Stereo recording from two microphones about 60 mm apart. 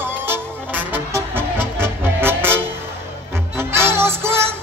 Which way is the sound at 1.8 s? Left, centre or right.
Right.